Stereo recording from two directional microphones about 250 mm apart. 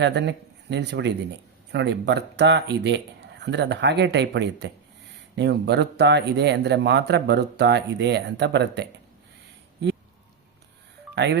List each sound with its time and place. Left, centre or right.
0.0 s speech: right
11.1 s speech: right